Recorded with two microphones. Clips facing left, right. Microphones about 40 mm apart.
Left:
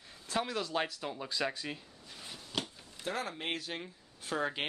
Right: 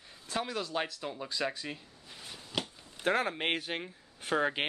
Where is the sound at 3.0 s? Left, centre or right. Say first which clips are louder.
Right 7 dB; right.